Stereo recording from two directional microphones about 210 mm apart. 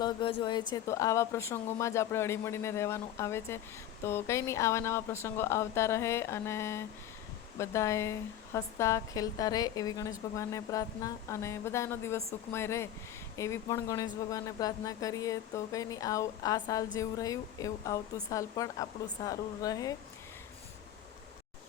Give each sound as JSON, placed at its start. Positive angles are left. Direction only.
{"t": 0.0, "sound": "speech", "side_deg": 20}